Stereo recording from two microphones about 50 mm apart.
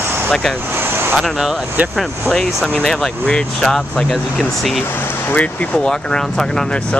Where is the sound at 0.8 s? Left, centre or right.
Right.